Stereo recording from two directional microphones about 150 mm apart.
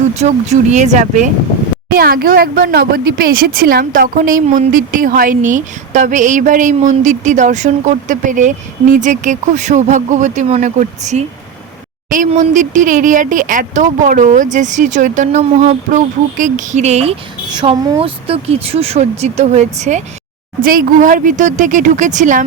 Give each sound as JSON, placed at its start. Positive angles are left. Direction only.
{"t": 0.1, "sound": "speech", "side_deg": -50}
{"t": 1.9, "sound": "speech", "side_deg": -80}
{"t": 20.6, "sound": "speech", "side_deg": -70}